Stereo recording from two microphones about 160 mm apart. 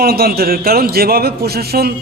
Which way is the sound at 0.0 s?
75° right (ahead or behind).